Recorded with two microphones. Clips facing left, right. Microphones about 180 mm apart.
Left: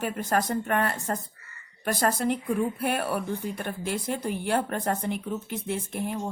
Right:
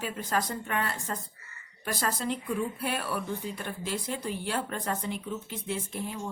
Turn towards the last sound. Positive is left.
turn(degrees=55)  # may be behind; listen again after turning